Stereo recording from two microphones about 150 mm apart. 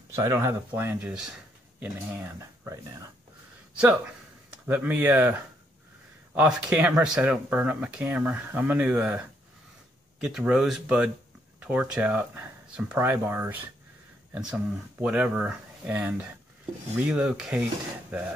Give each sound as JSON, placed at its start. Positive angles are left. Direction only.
{"t": 0.1, "sound": "speech", "side_deg": -20}
{"t": 4.6, "sound": "speech", "side_deg": -10}
{"t": 6.3, "sound": "speech", "side_deg": -5}
{"t": 10.2, "sound": "speech", "side_deg": -5}